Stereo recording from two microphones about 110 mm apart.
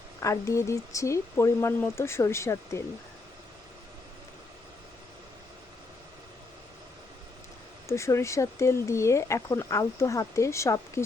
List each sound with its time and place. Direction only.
0.2 s speech: 30° left (ahead or behind)
7.9 s speech: 25° left (ahead or behind)